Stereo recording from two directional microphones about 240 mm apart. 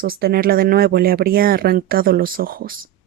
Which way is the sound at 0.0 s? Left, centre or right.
Right.